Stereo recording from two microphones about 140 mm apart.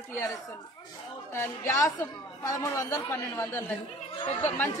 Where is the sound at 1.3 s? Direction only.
20° left (ahead or behind).